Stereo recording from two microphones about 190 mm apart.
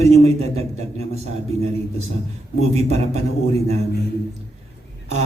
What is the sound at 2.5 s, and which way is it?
Speech, 35° right (ahead or behind).